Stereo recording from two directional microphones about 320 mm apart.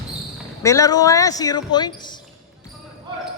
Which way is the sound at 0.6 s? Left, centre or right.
Centre.